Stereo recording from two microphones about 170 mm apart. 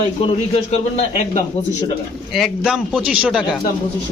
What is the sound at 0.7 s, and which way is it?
Speech, 40° left (ahead or behind).